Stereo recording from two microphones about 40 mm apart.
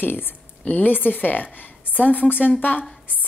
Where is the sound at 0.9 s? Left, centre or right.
Left.